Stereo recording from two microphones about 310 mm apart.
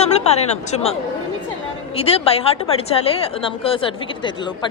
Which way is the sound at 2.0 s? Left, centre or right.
Centre.